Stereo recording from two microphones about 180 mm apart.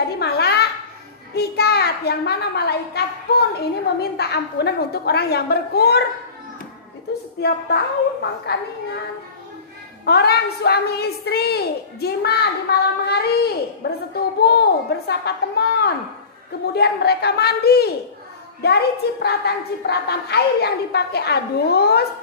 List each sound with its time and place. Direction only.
0.2 s a sound: 65° left (ahead or behind)
1.3 s a child's voice: 65° left (ahead or behind)
7.3 s a woman's voice: 65° left (ahead or behind)
10.0 s a woman's voice: 65° left (ahead or behind)